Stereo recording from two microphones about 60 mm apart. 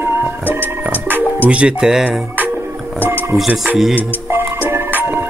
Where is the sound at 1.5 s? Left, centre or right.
Centre.